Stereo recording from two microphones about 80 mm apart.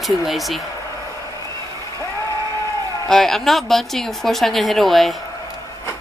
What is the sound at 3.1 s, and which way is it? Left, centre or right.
A woman's voice, centre.